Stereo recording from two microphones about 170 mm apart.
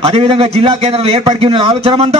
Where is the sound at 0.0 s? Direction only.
35° right (ahead or behind).